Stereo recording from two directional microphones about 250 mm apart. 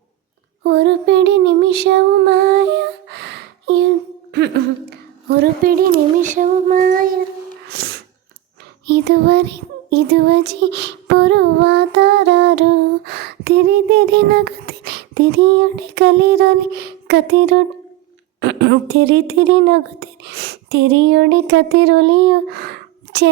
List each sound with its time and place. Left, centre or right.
0.6 s female singing: right
6.2 s child singing: right
7.7 s snort: right
8.9 s a sound: right
18.3 s speech: right